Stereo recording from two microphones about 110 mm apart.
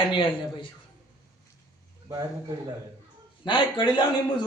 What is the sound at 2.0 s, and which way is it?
Speech, 35° right (ahead or behind).